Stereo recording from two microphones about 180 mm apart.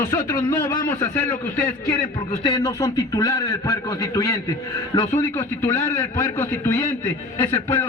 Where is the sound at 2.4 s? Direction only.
20° left (ahead or behind).